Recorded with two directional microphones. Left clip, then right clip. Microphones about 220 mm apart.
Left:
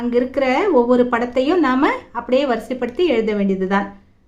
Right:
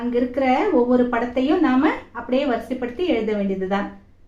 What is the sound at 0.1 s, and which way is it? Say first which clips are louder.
A woman's voice: left 2 dB; 50° left (ahead or behind).